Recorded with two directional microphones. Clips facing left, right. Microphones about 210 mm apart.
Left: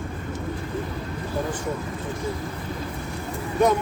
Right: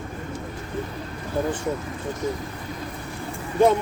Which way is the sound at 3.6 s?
30° right (ahead or behind).